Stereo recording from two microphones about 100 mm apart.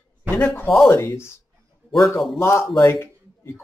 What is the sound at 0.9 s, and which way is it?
Speech, 25° left (ahead or behind).